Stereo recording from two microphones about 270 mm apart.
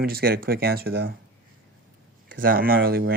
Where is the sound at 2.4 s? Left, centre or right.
Right.